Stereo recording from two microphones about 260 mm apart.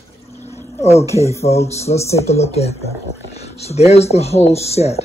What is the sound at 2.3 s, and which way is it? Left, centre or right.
Speech, left.